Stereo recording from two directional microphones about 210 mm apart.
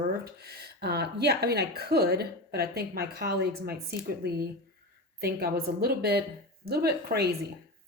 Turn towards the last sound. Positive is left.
turn(degrees=-50)  # may be behind; listen again after turning